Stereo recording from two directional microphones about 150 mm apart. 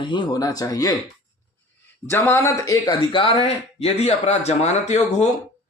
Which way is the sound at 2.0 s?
15° left (ahead or behind).